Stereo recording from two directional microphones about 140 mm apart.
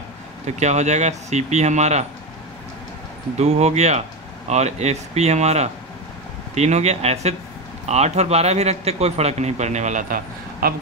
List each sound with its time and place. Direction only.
0.5 s speech: 55° right (ahead or behind)
3.3 s a man's voice: 50° right (ahead or behind); by 10.7 s 85° right